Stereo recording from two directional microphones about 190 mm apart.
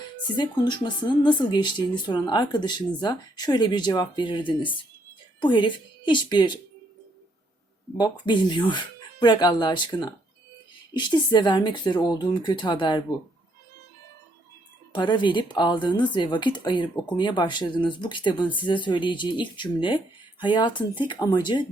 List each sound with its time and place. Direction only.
0.3 s speech: 25° left (ahead or behind)
7.9 s speech: 25° left (ahead or behind)
14.9 s speech: 25° left (ahead or behind)